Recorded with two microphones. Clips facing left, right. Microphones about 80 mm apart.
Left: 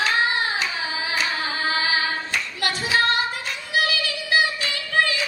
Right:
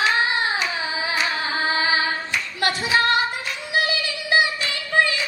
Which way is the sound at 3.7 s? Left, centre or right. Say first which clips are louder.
Even; right.